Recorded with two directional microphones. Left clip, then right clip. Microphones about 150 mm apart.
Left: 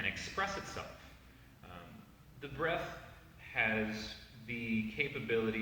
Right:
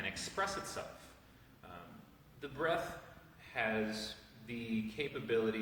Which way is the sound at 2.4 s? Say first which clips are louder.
Even; 40° right (ahead or behind).